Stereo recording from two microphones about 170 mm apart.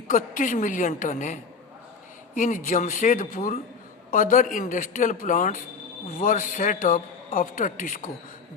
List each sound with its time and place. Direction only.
0.1 s speech: 50° left (ahead or behind)